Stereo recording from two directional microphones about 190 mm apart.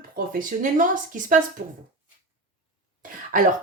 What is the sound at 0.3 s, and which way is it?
Speech, 45° right (ahead or behind).